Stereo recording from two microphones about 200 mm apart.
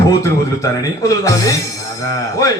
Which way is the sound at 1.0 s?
15° left (ahead or behind).